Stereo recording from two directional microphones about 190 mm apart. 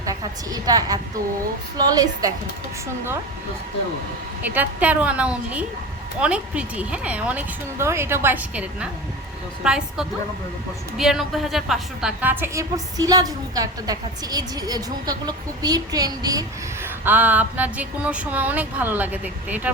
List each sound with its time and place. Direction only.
0.0 s a woman's voice: 20° right (ahead or behind)
4.4 s a woman's voice: 10° right (ahead or behind)